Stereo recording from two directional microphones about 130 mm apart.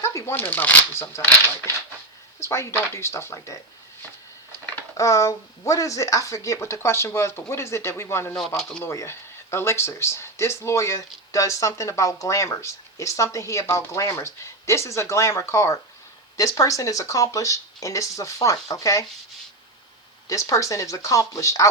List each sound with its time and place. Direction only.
0.0 s speech: 25° left (ahead or behind)
2.4 s speech: 20° left (ahead or behind)
4.9 s speech: 25° left (ahead or behind)
8.4 s speech: centre (ahead or behind)
8.8 s speech: 20° left (ahead or behind)
20.2 s speech: 25° left (ahead or behind)